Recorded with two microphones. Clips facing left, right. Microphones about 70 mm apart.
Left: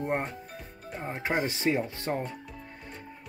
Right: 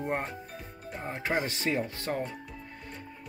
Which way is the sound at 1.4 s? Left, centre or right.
Left.